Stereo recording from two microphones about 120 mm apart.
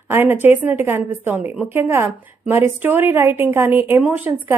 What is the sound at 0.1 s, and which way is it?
A woman's voice, 20° right (ahead or behind).